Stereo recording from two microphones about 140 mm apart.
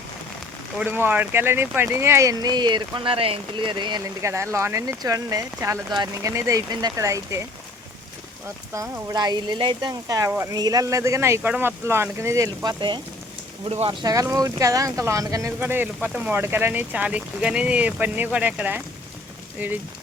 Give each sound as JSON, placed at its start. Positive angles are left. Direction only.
{"t": 0.8, "sound": "speech", "side_deg": -15}
{"t": 4.2, "sound": "speech", "side_deg": -20}
{"t": 8.7, "sound": "speech", "side_deg": -25}
{"t": 10.1, "sound": "speech", "side_deg": -25}
{"t": 13.7, "sound": "speech", "side_deg": -45}
{"t": 14.0, "sound": "speech", "side_deg": -25}